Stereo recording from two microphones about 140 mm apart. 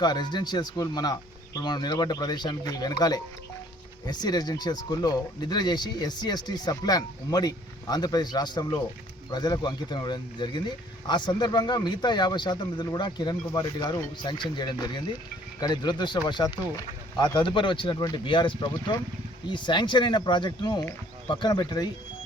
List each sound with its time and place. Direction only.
0.0 s speech: 30° left (ahead or behind)